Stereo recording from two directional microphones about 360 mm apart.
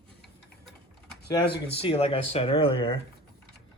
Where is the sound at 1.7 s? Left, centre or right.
Centre.